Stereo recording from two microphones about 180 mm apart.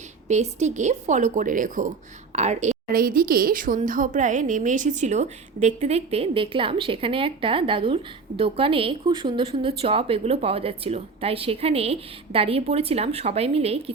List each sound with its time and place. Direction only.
0.3 s a woman's voice: 40° right (ahead or behind)